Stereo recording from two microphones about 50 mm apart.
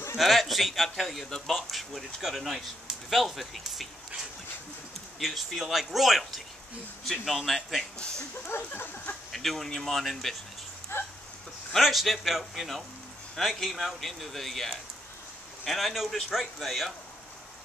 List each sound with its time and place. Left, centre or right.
0.2 s a man's voice: centre
5.2 s a man's voice: centre
8.0 s speech: centre
8.5 s a sound: left
9.3 s a man's voice: centre
10.9 s a sound: left
11.7 s a man's voice: centre